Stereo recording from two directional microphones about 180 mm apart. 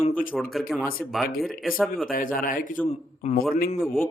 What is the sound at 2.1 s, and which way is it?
Speech, 50° left (ahead or behind).